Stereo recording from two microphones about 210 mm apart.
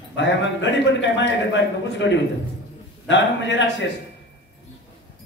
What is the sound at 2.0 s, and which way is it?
A man's voice, 60° left (ahead or behind).